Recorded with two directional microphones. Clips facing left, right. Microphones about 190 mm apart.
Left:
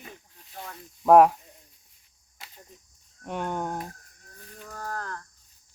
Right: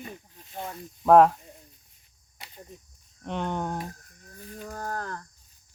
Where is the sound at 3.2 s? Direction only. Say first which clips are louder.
Even; 10° left (ahead or behind).